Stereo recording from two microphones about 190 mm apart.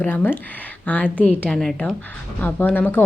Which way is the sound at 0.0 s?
10° left (ahead or behind).